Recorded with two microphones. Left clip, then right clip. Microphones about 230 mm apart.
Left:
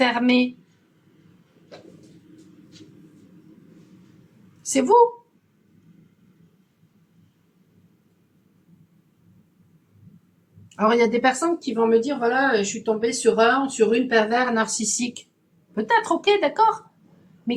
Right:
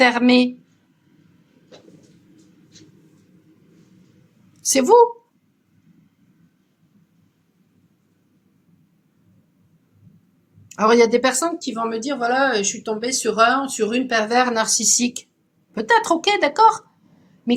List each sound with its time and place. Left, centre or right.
0.0 s speech: right
4.6 s a woman's voice: right
10.8 s speech: right